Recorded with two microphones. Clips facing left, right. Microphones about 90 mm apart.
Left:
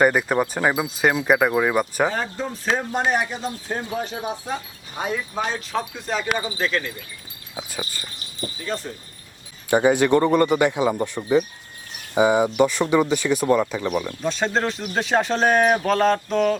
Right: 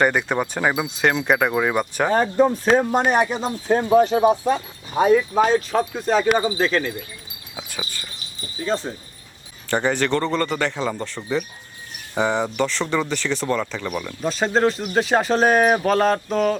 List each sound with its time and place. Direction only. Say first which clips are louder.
0.0 s speech: left 1 dB; 5° left (ahead or behind)
2.0 s speech: right 8 dB; 45° right (ahead or behind)
3.0 s speech: right 3 dB; 65° right (ahead or behind); by 6.9 s 35° right (ahead or behind)
8.6 s speech: right 6 dB; 25° right (ahead or behind)
9.6 s a man's voice: left 4 dB; 10° left (ahead or behind)